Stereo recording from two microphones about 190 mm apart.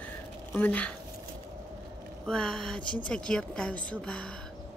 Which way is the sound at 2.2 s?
5° left (ahead or behind).